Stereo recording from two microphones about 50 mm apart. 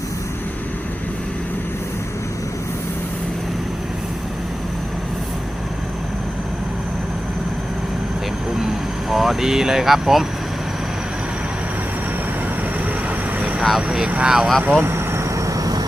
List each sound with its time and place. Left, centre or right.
8.5 s vehicle: centre
13.7 s speech: centre
14.6 s speech: right
14.8 s vehicle: right